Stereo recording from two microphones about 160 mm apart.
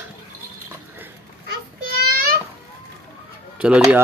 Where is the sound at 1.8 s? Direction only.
70° right (ahead or behind).